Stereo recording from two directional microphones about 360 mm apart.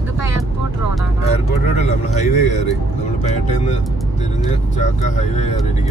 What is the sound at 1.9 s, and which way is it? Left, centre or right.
Speech, centre.